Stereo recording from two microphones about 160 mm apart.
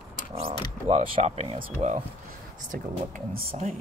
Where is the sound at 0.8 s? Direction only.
35° right (ahead or behind).